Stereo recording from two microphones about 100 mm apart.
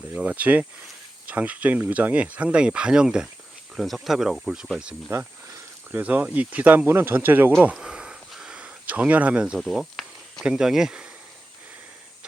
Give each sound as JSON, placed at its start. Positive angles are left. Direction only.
{"t": 0.1, "sound": "speech", "side_deg": -15}
{"t": 7.8, "sound": "a sound", "side_deg": -5}
{"t": 10.4, "sound": "speech", "side_deg": -5}